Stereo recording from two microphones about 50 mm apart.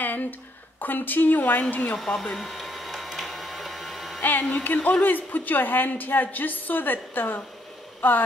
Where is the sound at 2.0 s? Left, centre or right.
Centre.